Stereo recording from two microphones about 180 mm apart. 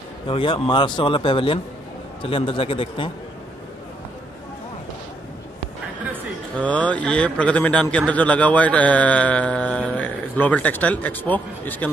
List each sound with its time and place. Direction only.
0.3 s a man's voice: 30° left (ahead or behind)
6.6 s speech: 5° left (ahead or behind)